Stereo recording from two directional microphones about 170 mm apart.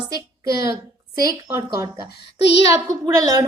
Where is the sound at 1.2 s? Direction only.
20° right (ahead or behind).